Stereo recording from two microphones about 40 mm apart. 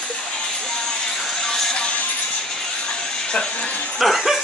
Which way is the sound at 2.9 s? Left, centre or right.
Centre.